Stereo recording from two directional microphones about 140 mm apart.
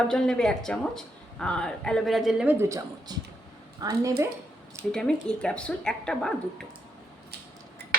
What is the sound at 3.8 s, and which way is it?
Speech, 25° right (ahead or behind).